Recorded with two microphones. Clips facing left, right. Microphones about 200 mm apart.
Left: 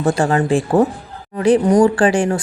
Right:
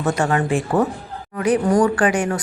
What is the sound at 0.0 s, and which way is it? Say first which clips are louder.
Speech: left 3 dB; 30° left (ahead or behind).